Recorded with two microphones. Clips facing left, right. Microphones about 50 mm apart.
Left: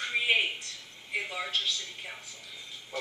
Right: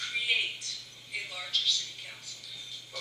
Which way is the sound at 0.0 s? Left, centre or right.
Left.